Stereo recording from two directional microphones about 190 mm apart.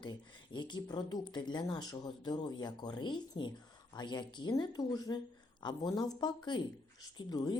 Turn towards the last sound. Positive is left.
turn(degrees=20)  # may be behind; listen again after turning